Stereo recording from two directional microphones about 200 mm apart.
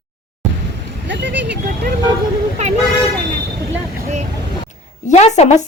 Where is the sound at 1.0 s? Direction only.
65° right (ahead or behind).